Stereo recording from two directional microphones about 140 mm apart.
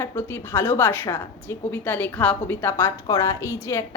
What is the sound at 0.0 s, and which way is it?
A woman's voice, 20° left (ahead or behind).